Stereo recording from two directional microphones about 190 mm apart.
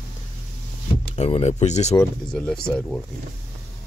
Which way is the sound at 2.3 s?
5° left (ahead or behind).